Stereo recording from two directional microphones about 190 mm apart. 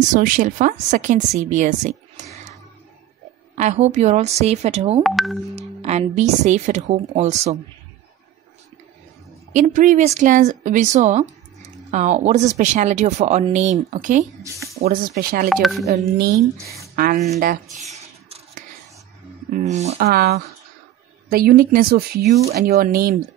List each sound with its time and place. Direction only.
0.1 s a woman's voice: 45° right (ahead or behind)
3.5 s speech: 35° right (ahead or behind)
5.0 s speech: centre (ahead or behind)
5.6 s speech: 35° right (ahead or behind)
9.5 s a woman's voice: 40° right (ahead or behind)
15.5 s speech: centre (ahead or behind)
15.9 s a woman's voice: 45° right (ahead or behind)
19.5 s speech: 35° right (ahead or behind)
20.0 s a woman's voice: 55° right (ahead or behind)